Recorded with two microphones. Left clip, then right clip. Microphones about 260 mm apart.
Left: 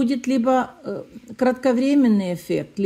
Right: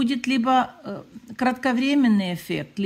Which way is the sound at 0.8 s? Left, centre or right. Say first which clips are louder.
Left 5 dB; right.